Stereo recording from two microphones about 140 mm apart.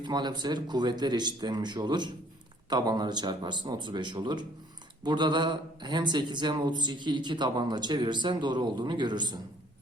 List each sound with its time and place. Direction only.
0.0 s speech: 30° right (ahead or behind)